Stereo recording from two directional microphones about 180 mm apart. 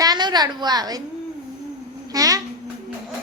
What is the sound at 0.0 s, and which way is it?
A woman's voice, 25° right (ahead or behind).